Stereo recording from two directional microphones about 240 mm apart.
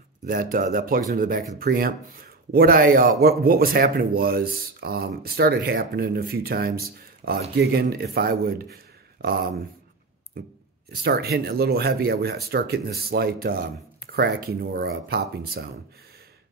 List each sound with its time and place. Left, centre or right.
0.3 s speech: right
10.9 s speech: right